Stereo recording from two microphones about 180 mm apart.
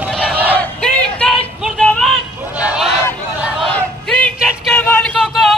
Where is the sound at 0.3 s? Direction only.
10° right (ahead or behind).